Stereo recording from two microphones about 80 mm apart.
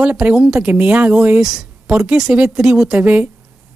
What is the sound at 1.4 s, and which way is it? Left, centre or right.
Speech, centre.